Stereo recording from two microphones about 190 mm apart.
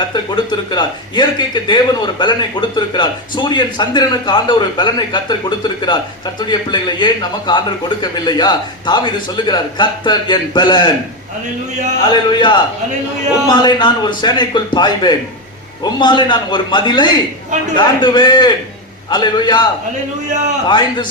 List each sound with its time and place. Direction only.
0.1 s speech: 25° left (ahead or behind)
12.1 s speech: 25° left (ahead or behind)
20.7 s speech: 25° left (ahead or behind)